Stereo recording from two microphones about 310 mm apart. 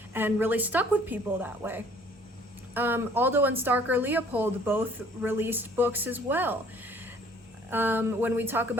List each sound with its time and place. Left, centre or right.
0.1 s a woman's voice: centre
7.7 s a woman's voice: centre